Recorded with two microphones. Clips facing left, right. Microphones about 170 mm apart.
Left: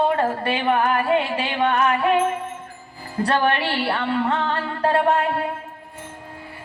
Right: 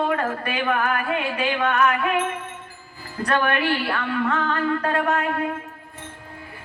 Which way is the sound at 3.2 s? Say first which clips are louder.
Left 2 dB; 30° left (ahead or behind).